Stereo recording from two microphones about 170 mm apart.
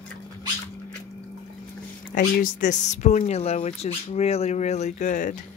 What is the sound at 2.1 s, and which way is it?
Speech, 50° left (ahead or behind).